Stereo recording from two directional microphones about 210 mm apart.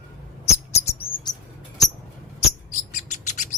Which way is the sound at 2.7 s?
35° left (ahead or behind).